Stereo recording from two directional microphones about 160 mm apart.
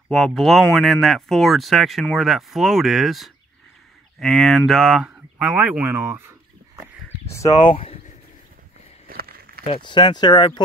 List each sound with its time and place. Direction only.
0.1 s speech: centre (ahead or behind); by 6.3 s 15° right (ahead or behind)
7.6 s speech: 35° left (ahead or behind)
9.0 s a sound: 70° right (ahead or behind)
9.7 s speech: 30° left (ahead or behind)